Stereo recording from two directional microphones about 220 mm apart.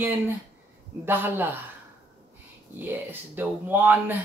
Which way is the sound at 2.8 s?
10° right (ahead or behind).